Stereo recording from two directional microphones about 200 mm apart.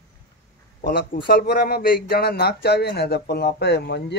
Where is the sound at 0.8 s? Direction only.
50° left (ahead or behind).